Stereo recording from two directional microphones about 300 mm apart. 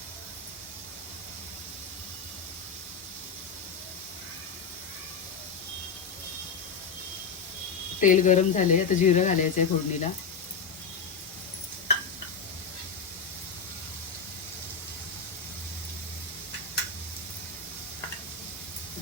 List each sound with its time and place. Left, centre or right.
8.0 s speech: left